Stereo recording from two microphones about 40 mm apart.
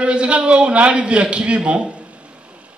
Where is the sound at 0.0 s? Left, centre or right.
Right.